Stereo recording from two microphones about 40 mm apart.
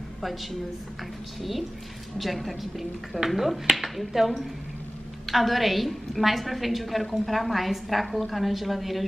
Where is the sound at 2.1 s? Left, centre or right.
Centre.